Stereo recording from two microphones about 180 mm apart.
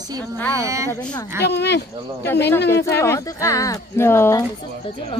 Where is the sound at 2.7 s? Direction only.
15° left (ahead or behind).